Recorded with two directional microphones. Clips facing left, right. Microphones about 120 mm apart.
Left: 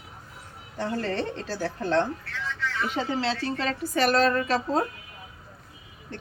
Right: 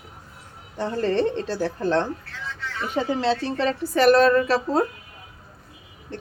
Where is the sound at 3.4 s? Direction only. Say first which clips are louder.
Right 5 dB; 30° right (ahead or behind).